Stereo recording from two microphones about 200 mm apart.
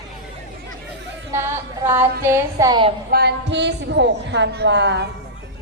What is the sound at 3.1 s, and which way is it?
A woman's voice, 55° right (ahead or behind).